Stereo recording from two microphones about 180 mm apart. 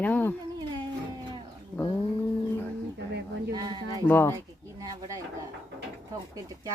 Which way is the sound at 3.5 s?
25° right (ahead or behind).